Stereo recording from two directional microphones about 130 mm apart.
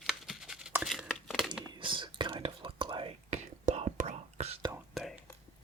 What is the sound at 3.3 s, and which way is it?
Whispering, 60° right (ahead or behind).